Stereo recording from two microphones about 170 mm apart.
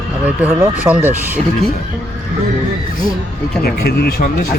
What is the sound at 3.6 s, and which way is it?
Speech, 65° left (ahead or behind).